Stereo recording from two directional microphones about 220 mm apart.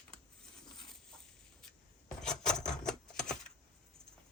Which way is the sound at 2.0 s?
5° left (ahead or behind).